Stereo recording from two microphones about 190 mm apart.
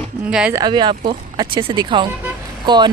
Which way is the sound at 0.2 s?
5° right (ahead or behind).